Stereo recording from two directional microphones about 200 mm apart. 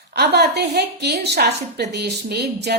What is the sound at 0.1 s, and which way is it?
A woman's voice, 55° right (ahead or behind).